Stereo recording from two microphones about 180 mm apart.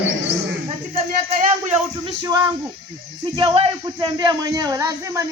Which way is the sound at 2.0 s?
20° right (ahead or behind).